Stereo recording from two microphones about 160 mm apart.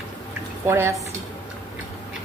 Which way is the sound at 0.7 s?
15° right (ahead or behind).